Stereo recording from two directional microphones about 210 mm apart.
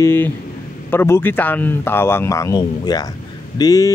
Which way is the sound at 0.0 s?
10° left (ahead or behind).